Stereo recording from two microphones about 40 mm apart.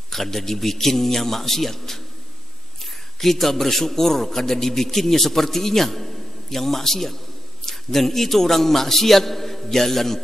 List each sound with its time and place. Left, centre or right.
0.1 s a man's voice: centre
3.2 s a man's voice: centre